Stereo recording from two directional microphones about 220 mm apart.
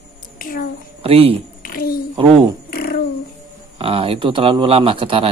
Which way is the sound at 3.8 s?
25° right (ahead or behind).